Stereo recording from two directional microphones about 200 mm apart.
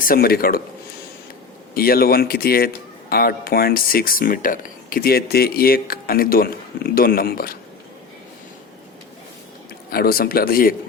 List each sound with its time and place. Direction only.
0.0 s speech: 50° left (ahead or behind)
1.7 s speech: 50° left (ahead or behind)
9.9 s speech: 50° left (ahead or behind)